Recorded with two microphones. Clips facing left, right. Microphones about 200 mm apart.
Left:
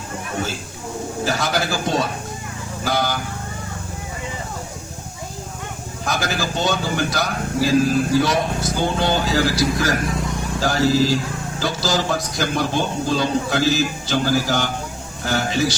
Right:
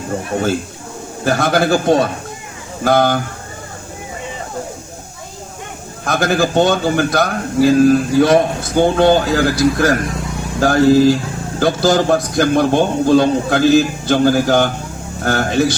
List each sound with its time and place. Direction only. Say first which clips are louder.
1.2 s speech: right 8 dB; 55° right (ahead or behind)
6.1 s speech: right 8 dB; 55° right (ahead or behind)